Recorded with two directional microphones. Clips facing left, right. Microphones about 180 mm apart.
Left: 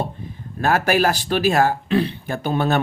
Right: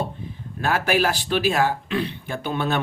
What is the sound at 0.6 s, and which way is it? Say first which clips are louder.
Speech: left 3 dB; 45° left (ahead or behind).